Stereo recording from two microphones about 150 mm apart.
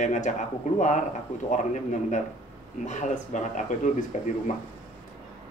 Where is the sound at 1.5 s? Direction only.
55° left (ahead or behind).